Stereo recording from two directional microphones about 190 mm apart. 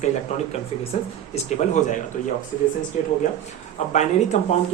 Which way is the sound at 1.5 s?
40° left (ahead or behind).